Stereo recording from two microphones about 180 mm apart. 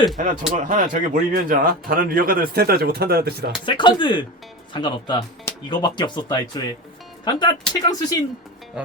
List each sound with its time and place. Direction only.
0.5 s speech: 45° right (ahead or behind)
3.7 s speech: 25° left (ahead or behind)